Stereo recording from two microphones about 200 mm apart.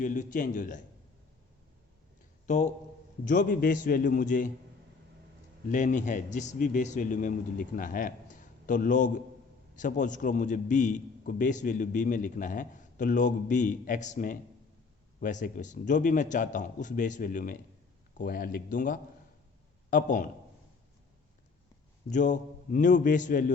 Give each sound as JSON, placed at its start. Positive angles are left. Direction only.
{"t": 0.0, "sound": "a man's voice", "side_deg": 40}
{"t": 2.5, "sound": "a man's voice", "side_deg": 35}
{"t": 5.7, "sound": "a man's voice", "side_deg": 40}
{"t": 22.0, "sound": "a man's voice", "side_deg": 40}